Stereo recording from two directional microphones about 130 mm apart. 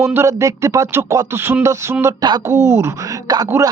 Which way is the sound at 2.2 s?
30° right (ahead or behind).